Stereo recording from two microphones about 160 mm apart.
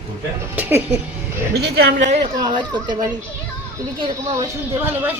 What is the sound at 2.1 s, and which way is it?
Speech, 30° right (ahead or behind).